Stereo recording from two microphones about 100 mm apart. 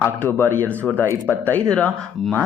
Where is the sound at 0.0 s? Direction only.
20° left (ahead or behind).